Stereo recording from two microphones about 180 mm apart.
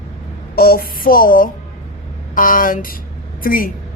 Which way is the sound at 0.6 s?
55° left (ahead or behind).